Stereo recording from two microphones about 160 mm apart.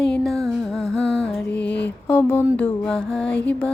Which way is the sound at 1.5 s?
90° left.